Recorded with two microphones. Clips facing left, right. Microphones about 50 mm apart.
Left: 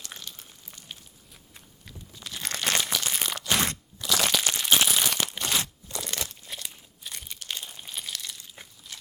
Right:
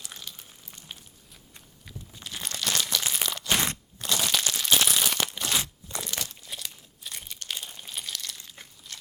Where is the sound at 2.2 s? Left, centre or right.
Right.